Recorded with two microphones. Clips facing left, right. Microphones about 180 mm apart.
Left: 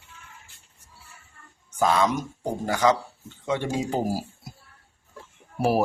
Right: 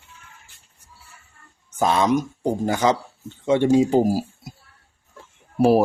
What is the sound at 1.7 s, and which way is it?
Speech, 20° right (ahead or behind).